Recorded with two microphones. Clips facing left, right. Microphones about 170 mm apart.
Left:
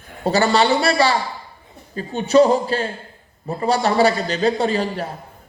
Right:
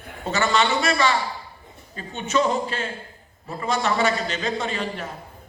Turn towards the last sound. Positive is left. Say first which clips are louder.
# left 7 dB
turn(degrees=35)  # may be behind; listen again after turning